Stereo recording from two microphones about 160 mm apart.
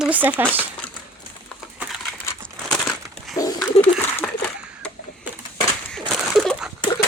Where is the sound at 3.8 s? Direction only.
10° left (ahead or behind).